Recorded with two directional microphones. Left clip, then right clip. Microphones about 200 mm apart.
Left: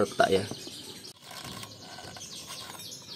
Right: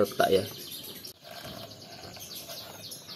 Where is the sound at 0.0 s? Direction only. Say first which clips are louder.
Even; 15° left (ahead or behind).